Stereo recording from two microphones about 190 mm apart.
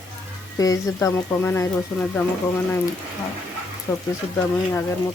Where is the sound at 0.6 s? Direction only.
15° left (ahead or behind).